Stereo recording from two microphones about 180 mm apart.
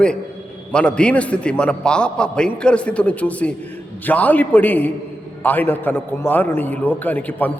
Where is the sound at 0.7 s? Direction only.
5° left (ahead or behind).